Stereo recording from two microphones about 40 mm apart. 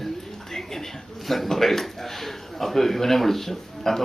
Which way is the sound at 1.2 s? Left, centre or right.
Centre.